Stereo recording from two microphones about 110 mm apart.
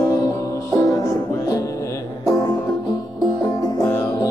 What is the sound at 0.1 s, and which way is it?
Music, 30° left (ahead or behind).